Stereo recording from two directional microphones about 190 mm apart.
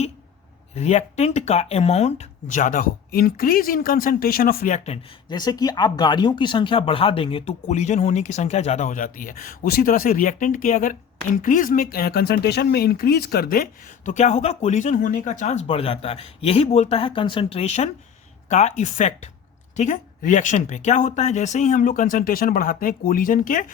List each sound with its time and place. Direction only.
0.8 s speech: 35° left (ahead or behind)
5.3 s speech: 20° left (ahead or behind); by 23.6 s 45° left (ahead or behind)